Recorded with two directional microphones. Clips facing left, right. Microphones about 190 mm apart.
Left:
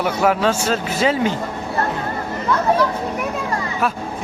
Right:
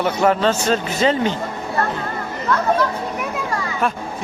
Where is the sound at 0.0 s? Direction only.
10° left (ahead or behind).